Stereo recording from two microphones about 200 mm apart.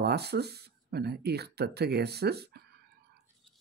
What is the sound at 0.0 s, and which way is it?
Speech, 55° right (ahead or behind).